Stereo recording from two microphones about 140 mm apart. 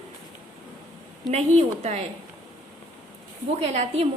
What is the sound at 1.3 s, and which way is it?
Speech, 55° right (ahead or behind).